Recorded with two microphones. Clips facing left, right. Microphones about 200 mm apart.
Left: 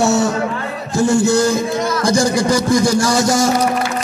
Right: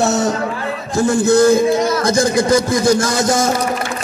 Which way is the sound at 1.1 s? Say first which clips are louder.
Right 4 dB; 20° right (ahead or behind).